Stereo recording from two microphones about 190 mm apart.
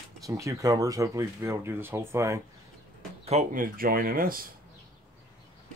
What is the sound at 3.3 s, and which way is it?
Speech, 40° right (ahead or behind).